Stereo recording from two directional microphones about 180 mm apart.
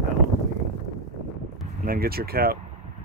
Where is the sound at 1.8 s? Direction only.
55° right (ahead or behind).